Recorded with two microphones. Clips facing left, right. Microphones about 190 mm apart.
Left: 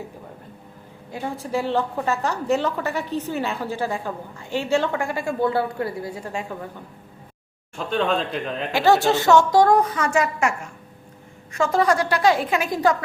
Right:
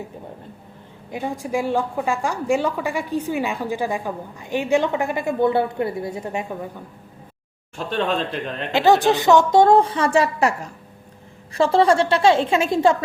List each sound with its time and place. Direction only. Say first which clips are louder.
1.1 s a woman's voice: right 2 dB; 15° right (ahead or behind)
7.9 s a man's voice: even; centre (ahead or behind)
8.7 s speech: right 2 dB; 20° right (ahead or behind)